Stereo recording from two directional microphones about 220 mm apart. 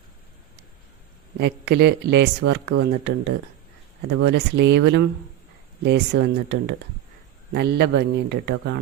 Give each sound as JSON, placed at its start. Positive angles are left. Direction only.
{"t": 1.4, "sound": "speech", "side_deg": -50}